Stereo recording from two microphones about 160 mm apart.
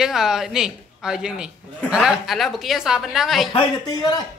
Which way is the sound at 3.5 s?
25° left (ahead or behind).